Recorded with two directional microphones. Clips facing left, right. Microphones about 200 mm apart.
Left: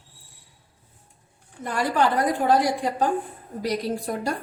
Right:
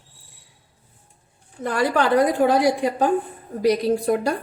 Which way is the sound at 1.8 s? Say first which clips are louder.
Right 4 dB; 70° right (ahead or behind).